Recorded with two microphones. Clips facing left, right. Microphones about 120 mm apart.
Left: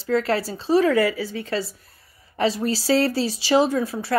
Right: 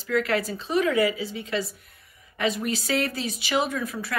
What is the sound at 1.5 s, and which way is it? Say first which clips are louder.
A woman's voice: left 2 dB; 30° left (ahead or behind).